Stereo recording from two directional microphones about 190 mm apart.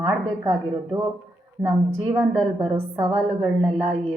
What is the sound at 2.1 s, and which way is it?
A woman's voice, 5° right (ahead or behind).